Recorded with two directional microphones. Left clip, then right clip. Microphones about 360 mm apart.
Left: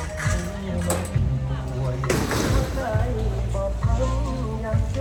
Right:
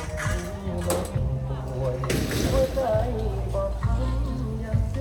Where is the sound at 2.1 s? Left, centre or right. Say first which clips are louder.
Left 7 dB; centre.